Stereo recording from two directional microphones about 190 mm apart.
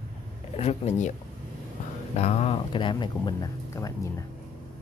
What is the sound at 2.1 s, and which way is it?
Speech, 35° left (ahead or behind).